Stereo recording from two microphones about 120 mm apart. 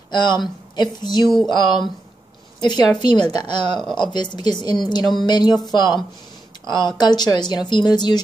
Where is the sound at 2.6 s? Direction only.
40° left (ahead or behind).